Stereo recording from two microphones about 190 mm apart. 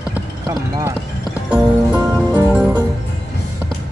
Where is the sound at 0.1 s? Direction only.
15° right (ahead or behind).